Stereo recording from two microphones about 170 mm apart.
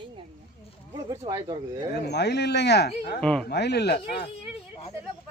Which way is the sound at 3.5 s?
75° left (ahead or behind).